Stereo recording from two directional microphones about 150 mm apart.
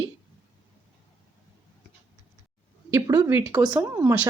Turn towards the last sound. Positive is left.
turn(degrees=-20)  # may be behind; listen again after turning